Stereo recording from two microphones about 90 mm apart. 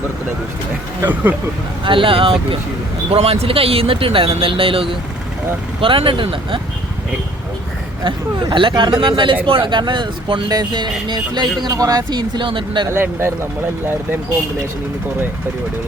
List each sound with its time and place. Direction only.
1.0 s speech: 20° right (ahead or behind)
1.8 s speech: 70° right (ahead or behind)
3.1 s speech: 90° right; by 6.6 s 75° right (ahead or behind)
8.0 s speech: 60° right (ahead or behind)
12.9 s speech: 25° right (ahead or behind)